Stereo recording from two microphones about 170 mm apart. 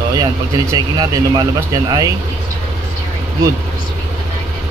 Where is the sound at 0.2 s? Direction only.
25° right (ahead or behind).